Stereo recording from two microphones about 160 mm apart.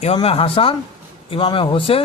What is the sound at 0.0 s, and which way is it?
Speech, 40° left (ahead or behind).